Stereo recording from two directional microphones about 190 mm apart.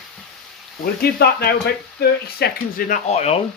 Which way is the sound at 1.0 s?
55° left (ahead or behind).